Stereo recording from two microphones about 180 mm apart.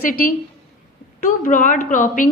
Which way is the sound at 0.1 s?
50° left (ahead or behind).